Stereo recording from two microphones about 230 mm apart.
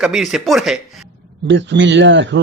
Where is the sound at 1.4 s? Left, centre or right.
Right.